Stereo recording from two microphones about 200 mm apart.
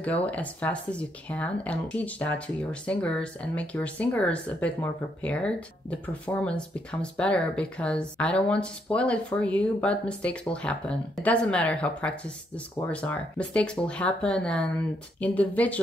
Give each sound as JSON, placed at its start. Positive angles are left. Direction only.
{"t": 0.0, "sound": "speech", "side_deg": 5}